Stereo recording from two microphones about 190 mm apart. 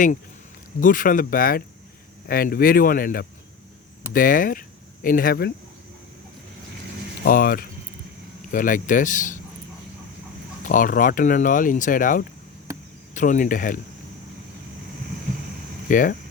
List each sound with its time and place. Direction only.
0.8 s speech: 45° left (ahead or behind)
7.3 s speech: 50° left (ahead or behind)
10.6 s speech: 45° left (ahead or behind)
15.9 s speech: 45° left (ahead or behind)